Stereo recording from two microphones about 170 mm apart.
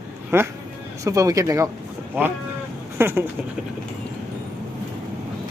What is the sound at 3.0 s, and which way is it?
Speech, 15° right (ahead or behind).